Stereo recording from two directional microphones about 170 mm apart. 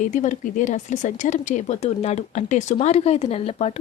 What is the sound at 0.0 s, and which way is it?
Speech, 50° left (ahead or behind).